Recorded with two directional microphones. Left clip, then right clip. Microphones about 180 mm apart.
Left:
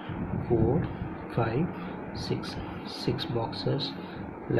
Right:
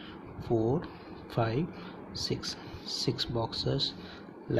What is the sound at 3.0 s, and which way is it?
Speech, 55° right (ahead or behind).